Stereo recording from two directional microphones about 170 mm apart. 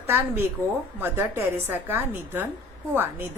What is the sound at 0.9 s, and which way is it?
A woman's voice, 10° right (ahead or behind).